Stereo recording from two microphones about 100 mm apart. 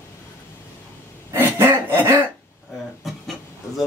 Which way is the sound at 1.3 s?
25° right (ahead or behind).